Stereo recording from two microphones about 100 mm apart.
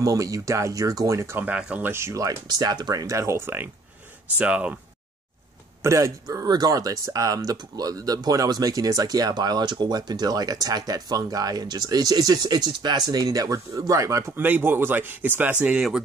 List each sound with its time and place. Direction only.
0.0 s speech: 35° right (ahead or behind)
1.4 s speech: 10° right (ahead or behind)
1.9 s speech: 25° right (ahead or behind)
4.4 s speech: 10° right (ahead or behind)
5.8 s speech: 30° right (ahead or behind)
15.6 s speech: 10° right (ahead or behind)